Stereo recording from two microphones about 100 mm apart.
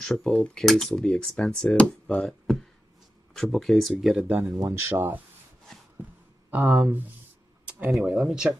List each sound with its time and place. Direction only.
0.0 s speech: 5° left (ahead or behind)
4.7 s speech: 20° right (ahead or behind)
6.5 s speech: 30° right (ahead or behind)
6.8 s speech: 15° right (ahead or behind)
7.9 s speech: 5° right (ahead or behind)